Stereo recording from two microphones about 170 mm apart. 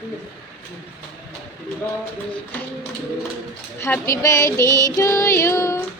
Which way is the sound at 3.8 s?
15° left (ahead or behind).